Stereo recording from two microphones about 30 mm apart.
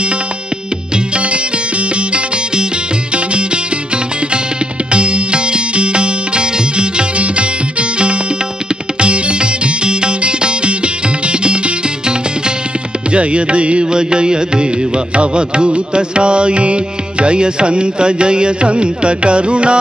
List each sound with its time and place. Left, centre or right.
0.9 s music: right
4.9 s music: right
9.0 s sitar: right
11.2 s music: right
13.1 s music: right
13.9 s music: right